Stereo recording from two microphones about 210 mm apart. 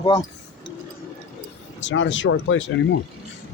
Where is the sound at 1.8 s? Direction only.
60° left (ahead or behind).